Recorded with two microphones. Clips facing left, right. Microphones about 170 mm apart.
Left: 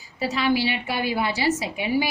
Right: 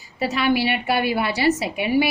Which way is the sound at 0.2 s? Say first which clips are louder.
Right 2 dB; 65° right (ahead or behind).